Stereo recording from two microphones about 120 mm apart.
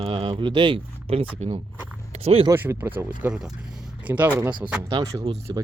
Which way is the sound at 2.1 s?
55° right (ahead or behind).